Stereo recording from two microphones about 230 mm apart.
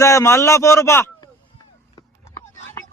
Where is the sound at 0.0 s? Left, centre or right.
Centre.